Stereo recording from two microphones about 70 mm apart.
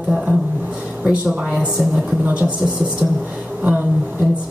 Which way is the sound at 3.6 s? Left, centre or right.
Right.